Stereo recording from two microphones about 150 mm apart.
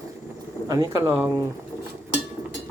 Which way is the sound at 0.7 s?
25° right (ahead or behind).